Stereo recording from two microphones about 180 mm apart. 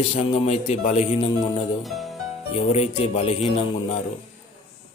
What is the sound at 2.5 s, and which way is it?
Speech, 35° left (ahead or behind).